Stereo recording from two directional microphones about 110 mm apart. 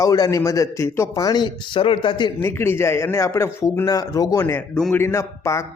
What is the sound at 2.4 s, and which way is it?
A man's voice, 20° left (ahead or behind).